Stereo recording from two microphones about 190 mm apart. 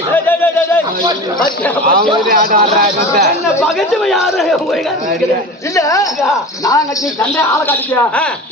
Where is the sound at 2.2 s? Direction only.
45° right (ahead or behind).